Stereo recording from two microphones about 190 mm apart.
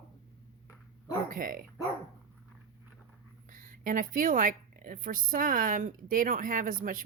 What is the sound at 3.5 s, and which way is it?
A woman's voice, 45° right (ahead or behind).